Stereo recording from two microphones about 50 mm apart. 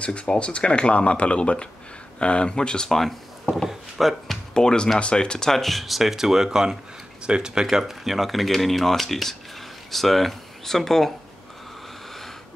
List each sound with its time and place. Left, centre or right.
0.0 s speech: left
2.9 s speech: centre
4.3 s speech: centre
7.7 s speech: centre